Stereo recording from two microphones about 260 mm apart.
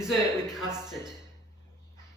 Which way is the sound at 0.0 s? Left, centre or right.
Centre.